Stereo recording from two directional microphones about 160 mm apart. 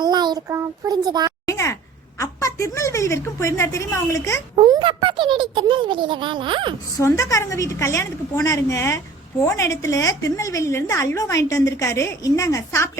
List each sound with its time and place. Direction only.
0.0 s a child's voice: 25° right (ahead or behind)
1.5 s a sound: 20° left (ahead or behind)
2.1 s a woman's voice: 20° left (ahead or behind)
4.6 s a child's voice: 30° right (ahead or behind)
6.9 s a woman's voice: 20° left (ahead or behind)